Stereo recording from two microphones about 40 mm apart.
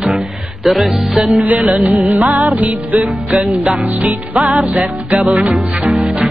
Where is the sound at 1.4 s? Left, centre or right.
Right.